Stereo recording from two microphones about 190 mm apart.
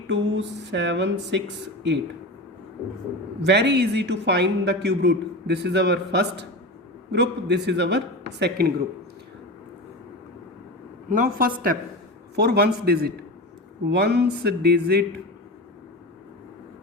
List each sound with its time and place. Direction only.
0.1 s speech: 75° right (ahead or behind)
3.4 s a man's voice: 65° right (ahead or behind)
11.1 s a woman's voice: 50° right (ahead or behind)